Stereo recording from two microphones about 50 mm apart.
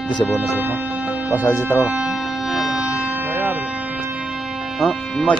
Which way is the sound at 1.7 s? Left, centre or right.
Right.